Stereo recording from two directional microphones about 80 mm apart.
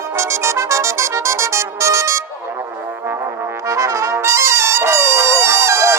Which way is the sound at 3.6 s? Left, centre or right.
Right.